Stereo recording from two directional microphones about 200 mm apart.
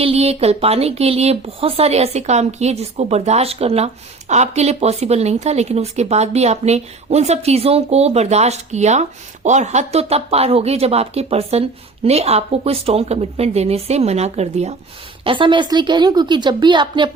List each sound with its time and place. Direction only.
0.0 s a woman's voice: 30° right (ahead or behind)